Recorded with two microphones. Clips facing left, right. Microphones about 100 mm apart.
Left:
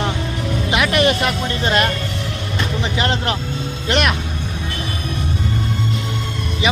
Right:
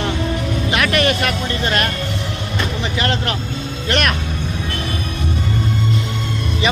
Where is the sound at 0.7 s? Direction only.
20° left (ahead or behind).